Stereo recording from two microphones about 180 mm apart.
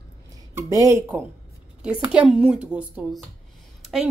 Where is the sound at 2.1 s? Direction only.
5° right (ahead or behind).